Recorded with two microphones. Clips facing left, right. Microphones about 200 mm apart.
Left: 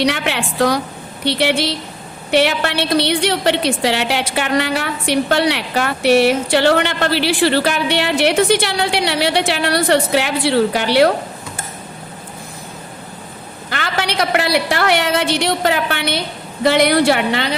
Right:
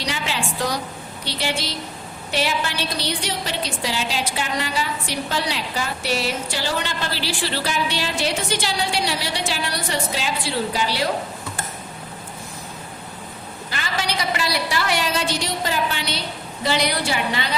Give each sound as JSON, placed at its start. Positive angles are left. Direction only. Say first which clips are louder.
{"t": 0.0, "sound": "a woman's voice", "louder": "left 8 dB", "side_deg": 65}
{"t": 13.7, "sound": "a woman's voice", "louder": "left 5 dB", "side_deg": 65}